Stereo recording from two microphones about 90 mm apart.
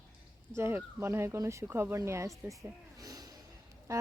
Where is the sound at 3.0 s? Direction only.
45° right (ahead or behind).